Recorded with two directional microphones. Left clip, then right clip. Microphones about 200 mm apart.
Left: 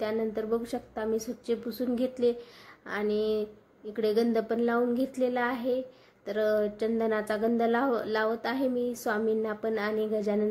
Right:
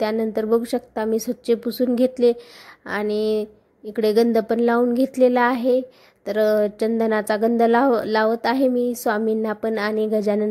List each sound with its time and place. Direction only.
0.0 s a woman's voice: 40° right (ahead or behind)